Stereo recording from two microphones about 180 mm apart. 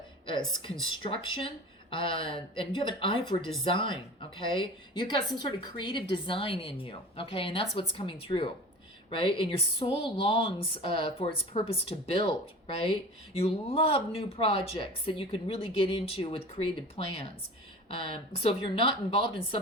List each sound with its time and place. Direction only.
0.3 s speech: 25° left (ahead or behind)
13.4 s a woman's voice: 30° left (ahead or behind)
19.1 s speech: 30° left (ahead or behind)